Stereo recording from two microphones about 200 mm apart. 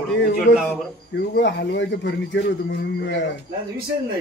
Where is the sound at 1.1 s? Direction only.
55° left (ahead or behind).